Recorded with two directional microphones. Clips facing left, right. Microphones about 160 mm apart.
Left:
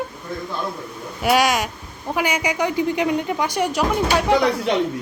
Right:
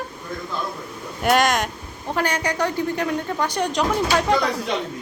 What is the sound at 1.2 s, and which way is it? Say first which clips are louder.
A woman's voice: left 1 dB; 5° left (ahead or behind).